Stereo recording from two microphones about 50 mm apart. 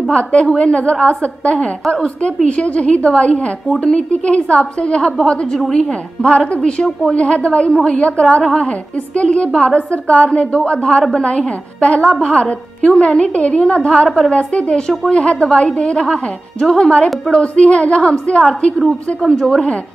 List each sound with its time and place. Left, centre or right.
0.1 s a woman's voice: left
14.0 s a woman's voice: centre
14.3 s a woman's voice: left
19.2 s a woman's voice: centre